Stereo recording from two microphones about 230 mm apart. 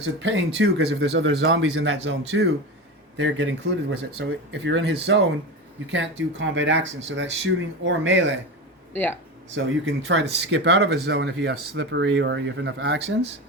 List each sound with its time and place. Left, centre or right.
0.2 s speech: right
8.9 s speech: centre
9.8 s speech: right